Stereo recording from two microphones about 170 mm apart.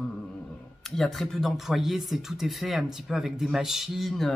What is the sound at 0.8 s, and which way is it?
Speech, centre (ahead or behind).